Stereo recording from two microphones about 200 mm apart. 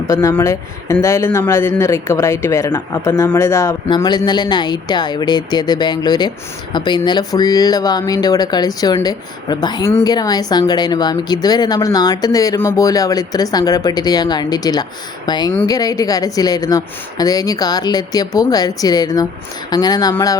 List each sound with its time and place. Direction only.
0.1 s speech: 15° left (ahead or behind)